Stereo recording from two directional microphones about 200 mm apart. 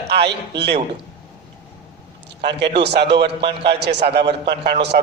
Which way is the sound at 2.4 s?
55° right (ahead or behind).